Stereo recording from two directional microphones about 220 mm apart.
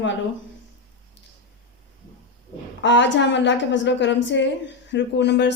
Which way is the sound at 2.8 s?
55° left (ahead or behind).